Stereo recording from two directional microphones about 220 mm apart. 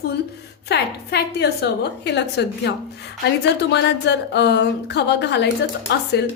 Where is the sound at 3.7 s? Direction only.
50° left (ahead or behind).